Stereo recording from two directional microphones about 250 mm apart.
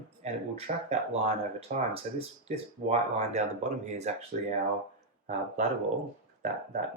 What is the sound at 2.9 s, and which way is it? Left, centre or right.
Speech, right.